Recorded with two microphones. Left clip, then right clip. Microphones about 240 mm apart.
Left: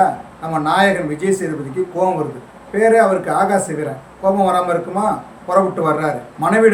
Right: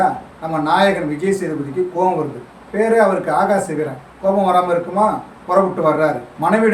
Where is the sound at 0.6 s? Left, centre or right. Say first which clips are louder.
Even; centre.